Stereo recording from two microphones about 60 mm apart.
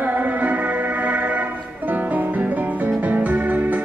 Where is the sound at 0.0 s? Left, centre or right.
Right.